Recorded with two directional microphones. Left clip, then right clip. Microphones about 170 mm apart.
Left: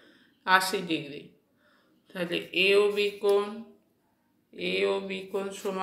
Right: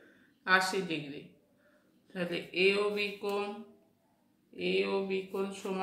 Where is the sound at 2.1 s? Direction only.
20° left (ahead or behind).